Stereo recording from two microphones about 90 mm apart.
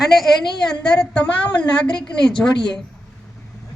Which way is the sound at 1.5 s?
65° left (ahead or behind).